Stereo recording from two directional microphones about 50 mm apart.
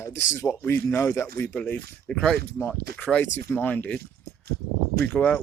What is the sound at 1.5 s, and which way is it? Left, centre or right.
Speech, left.